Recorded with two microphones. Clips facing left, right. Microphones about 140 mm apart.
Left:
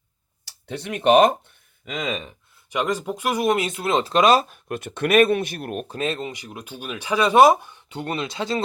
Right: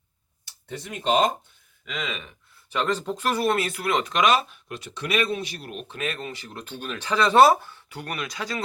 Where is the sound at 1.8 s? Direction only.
45° left (ahead or behind).